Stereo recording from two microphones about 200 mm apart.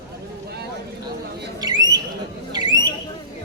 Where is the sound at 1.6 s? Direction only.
20° right (ahead or behind).